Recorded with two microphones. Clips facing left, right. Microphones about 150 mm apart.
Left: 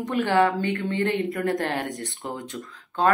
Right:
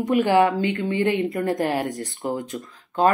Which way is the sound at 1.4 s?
5° right (ahead or behind).